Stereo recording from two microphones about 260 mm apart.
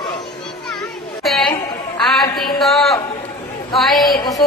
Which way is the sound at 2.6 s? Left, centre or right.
Centre.